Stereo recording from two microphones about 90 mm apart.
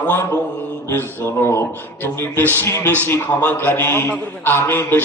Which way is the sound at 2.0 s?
25° left (ahead or behind).